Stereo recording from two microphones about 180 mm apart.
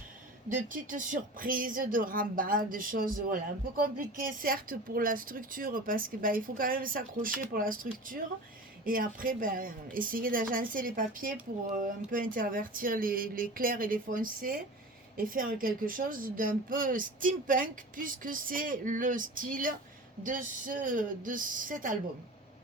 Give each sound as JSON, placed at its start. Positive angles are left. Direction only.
{"t": 0.4, "sound": "speech", "side_deg": -50}